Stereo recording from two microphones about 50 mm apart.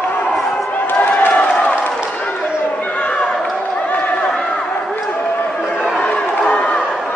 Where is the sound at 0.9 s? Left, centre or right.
Left.